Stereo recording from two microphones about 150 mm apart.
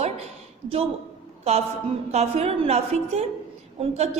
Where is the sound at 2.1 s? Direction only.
45° right (ahead or behind).